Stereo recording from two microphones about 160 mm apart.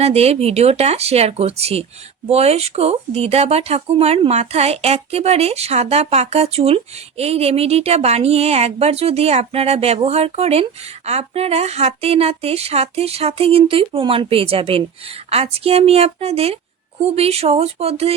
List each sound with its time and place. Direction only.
0.0 s speech: 40° right (ahead or behind)